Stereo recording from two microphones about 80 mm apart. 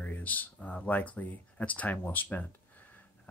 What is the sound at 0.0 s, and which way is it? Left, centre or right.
Speech, centre.